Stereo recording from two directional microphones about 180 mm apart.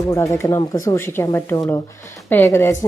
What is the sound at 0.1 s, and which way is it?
A woman's voice, 15° left (ahead or behind).